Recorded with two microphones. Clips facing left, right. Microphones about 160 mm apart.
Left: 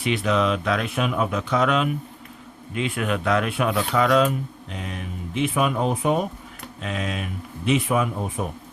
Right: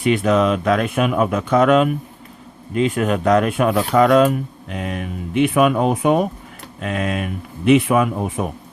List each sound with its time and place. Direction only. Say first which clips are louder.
0.0 s speech: right 6 dB; 45° right (ahead or behind); by 6.2 s 70° right (ahead or behind)
6.8 s speech: right 6 dB; 55° right (ahead or behind); by 8.4 s 75° right (ahead or behind)